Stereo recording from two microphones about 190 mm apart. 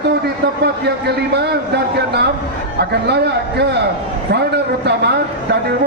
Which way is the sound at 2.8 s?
60° right (ahead or behind).